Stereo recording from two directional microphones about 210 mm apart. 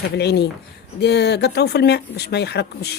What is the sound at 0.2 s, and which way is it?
Speech, 50° left (ahead or behind).